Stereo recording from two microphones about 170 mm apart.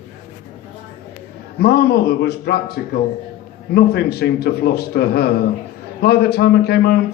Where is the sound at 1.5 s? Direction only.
70° left (ahead or behind).